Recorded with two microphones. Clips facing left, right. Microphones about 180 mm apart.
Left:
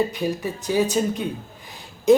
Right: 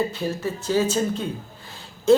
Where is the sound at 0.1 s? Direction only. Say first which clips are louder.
Left 1 dB; 15° left (ahead or behind).